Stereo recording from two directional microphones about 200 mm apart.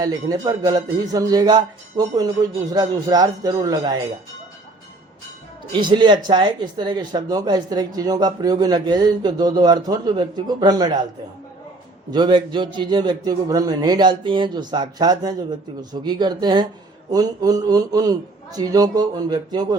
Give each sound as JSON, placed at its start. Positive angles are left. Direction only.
{"t": 0.0, "sound": "speech", "side_deg": -20}
{"t": 5.7, "sound": "speech", "side_deg": -25}
{"t": 12.1, "sound": "speech", "side_deg": -25}